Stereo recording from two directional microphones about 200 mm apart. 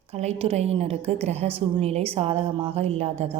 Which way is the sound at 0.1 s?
30° right (ahead or behind).